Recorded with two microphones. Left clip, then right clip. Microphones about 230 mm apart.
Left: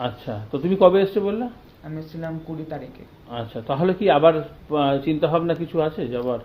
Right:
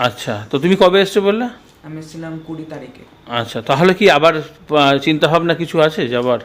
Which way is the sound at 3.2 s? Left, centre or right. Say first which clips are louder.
Right 10 dB; right.